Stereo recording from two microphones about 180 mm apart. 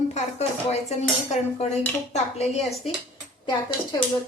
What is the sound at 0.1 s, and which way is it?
Dishes, 40° left (ahead or behind).